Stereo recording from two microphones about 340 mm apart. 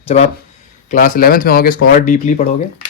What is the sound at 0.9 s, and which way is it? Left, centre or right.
A man's voice, left.